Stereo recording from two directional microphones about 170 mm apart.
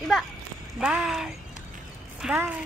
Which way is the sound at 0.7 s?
5° right (ahead or behind).